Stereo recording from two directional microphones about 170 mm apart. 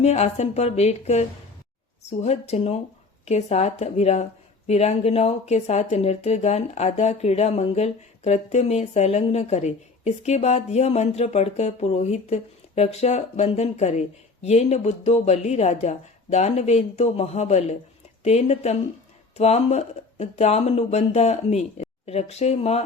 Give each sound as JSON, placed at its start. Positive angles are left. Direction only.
{"t": 0.0, "sound": "speech", "side_deg": 40}